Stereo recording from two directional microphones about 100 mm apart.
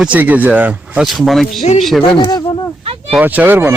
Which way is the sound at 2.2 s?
45° left (ahead or behind).